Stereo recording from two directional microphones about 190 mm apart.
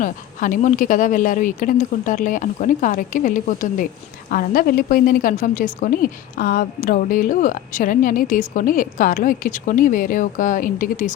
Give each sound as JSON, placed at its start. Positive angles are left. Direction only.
{"t": 0.0, "sound": "a woman's voice", "side_deg": 45}